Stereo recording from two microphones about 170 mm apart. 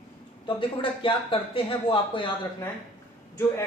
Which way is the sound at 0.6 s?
30° left (ahead or behind).